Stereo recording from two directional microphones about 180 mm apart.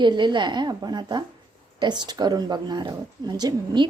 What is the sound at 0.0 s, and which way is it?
Speech, 25° right (ahead or behind).